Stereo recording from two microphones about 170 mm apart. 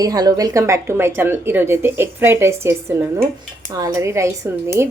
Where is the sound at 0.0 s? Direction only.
20° right (ahead or behind).